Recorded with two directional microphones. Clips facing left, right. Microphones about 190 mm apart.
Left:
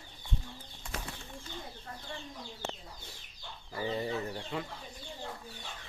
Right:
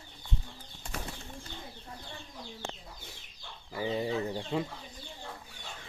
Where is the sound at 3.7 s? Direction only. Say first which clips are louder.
Right 2 dB; 15° right (ahead or behind).